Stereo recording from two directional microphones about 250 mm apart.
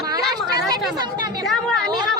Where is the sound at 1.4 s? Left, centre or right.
Centre.